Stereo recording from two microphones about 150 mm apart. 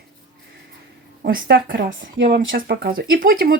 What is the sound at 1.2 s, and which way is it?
Speech, 85° right.